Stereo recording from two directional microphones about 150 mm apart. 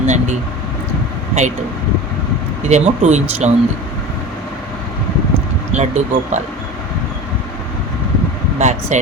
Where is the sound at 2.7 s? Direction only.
50° right (ahead or behind).